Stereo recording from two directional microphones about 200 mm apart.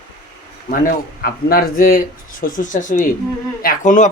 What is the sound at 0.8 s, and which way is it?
Speech, 50° left (ahead or behind).